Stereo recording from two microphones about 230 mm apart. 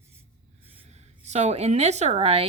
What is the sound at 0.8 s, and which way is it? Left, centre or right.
A woman's voice, right.